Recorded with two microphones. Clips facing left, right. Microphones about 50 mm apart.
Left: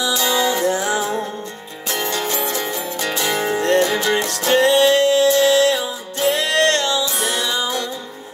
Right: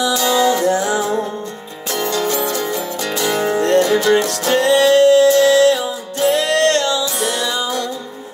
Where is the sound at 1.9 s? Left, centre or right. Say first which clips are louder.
Right 3 dB; left.